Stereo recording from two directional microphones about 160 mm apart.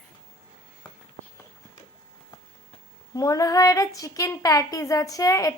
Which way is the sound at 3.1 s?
20° left (ahead or behind).